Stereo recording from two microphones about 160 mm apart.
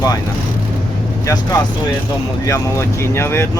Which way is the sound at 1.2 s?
20° left (ahead or behind).